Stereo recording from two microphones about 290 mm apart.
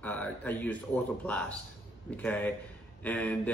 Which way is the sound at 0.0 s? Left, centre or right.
Centre.